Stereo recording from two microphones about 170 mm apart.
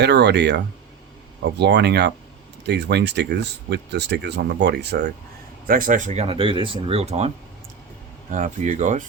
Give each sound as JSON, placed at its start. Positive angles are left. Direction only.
{"t": 0.0, "sound": "speech", "side_deg": -85}
{"t": 5.6, "sound": "speech", "side_deg": -55}
{"t": 8.3, "sound": "speech", "side_deg": -50}